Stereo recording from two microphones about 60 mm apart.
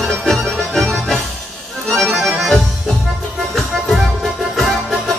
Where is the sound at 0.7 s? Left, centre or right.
Centre.